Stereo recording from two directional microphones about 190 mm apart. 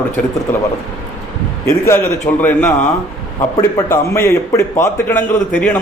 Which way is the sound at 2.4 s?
10° left (ahead or behind).